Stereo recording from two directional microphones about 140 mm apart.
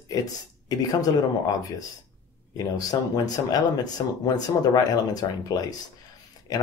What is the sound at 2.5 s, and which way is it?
Speech, 30° left (ahead or behind).